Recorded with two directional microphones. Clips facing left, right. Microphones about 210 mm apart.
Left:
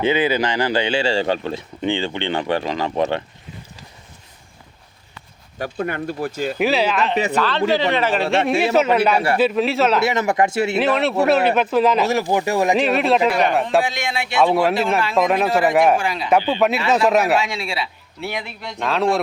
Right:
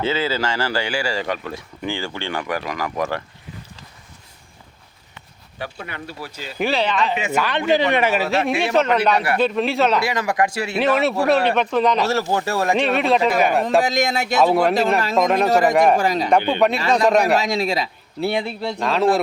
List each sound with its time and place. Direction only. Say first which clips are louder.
0.0 s a man's voice: left 4 dB; 15° left (ahead or behind)
5.5 s speech: left 8 dB; 45° left (ahead or behind)
6.6 s speech: left 1 dB; 5° left (ahead or behind)
7.3 s speech: right 2 dB; 15° right (ahead or behind)
10.0 s a man's voice: left 3 dB; 25° left (ahead or behind)
10.8 s speech: right 2 dB; centre (ahead or behind)
12.0 s speech: left 2 dB; 15° left (ahead or behind)
12.7 s speech: right 1 dB; centre (ahead or behind)
13.8 s a man's voice: right 4 dB; 40° right (ahead or behind)
14.4 s speech: even; centre (ahead or behind)
16.0 s a man's voice: right 4 dB; 40° right (ahead or behind)
16.5 s speech: even; 5° left (ahead or behind)
17.3 s a man's voice: right 2 dB; 40° right (ahead or behind)
18.8 s speech: right 1 dB; centre (ahead or behind)